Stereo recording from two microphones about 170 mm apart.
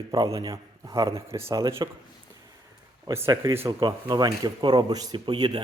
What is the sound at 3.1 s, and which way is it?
Speech, 15° right (ahead or behind).